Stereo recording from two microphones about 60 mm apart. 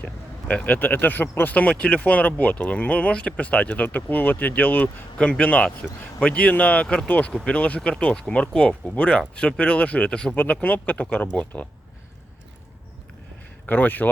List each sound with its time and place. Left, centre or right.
0.0 s speech: left
10.3 s speech: left
13.7 s speech: left